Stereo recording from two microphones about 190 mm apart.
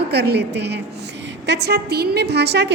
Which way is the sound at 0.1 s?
60° right (ahead or behind).